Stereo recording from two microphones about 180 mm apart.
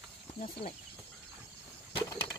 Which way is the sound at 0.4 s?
40° left (ahead or behind).